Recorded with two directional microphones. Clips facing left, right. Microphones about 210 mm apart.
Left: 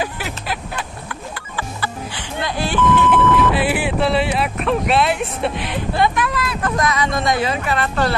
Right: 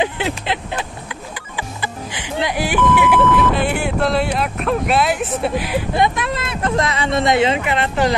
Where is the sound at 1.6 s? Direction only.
15° right (ahead or behind).